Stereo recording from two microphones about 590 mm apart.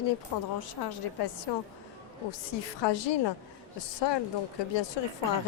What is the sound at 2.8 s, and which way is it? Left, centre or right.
Speech, left.